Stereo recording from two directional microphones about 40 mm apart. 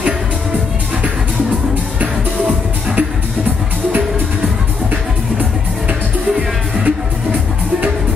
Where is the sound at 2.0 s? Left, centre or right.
Right.